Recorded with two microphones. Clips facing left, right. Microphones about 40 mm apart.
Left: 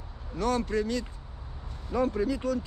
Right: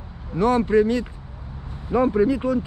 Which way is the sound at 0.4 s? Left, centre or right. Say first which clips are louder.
Right 10 dB; right.